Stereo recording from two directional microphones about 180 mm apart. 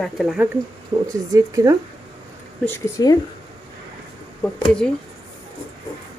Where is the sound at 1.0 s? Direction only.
20° right (ahead or behind).